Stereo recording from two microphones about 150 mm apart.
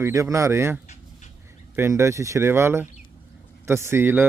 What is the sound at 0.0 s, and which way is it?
A man's voice, 20° right (ahead or behind).